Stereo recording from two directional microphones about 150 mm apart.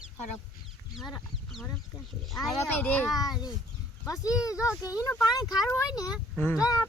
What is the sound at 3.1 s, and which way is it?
Speech, 25° left (ahead or behind).